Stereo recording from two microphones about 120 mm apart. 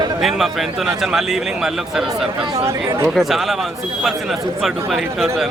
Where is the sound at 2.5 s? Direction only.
25° right (ahead or behind).